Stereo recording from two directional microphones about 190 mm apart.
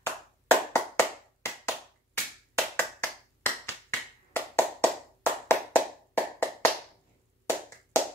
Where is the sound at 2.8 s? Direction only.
10° left (ahead or behind).